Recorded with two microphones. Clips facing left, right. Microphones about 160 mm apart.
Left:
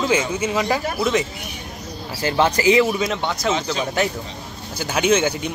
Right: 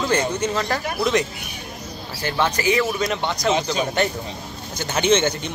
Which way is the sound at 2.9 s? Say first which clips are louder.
Left 1 dB; centre (ahead or behind).